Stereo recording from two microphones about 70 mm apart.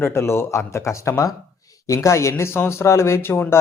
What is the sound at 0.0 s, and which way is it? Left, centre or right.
Speech, left.